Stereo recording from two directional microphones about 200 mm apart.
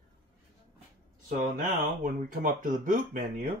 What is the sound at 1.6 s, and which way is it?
Speech, 40° right (ahead or behind).